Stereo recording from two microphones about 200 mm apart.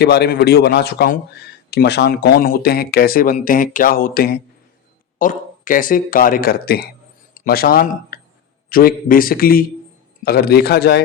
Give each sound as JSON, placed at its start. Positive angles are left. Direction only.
{"t": 0.0, "sound": "speech", "side_deg": 55}